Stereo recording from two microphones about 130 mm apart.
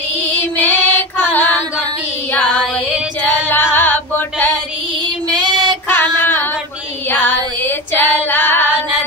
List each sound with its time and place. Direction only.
0.6 s child singing: 15° left (ahead or behind)
1.3 s female singing: 15° left (ahead or behind)
3.2 s female singing: 15° left (ahead or behind)
3.7 s a sound: 15° left (ahead or behind)
5.3 s child singing: 35° right (ahead or behind)
5.9 s music: 15° left (ahead or behind)
7.1 s female singing: 15° left (ahead or behind)